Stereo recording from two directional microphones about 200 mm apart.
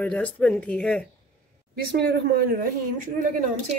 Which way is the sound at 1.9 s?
55° right (ahead or behind).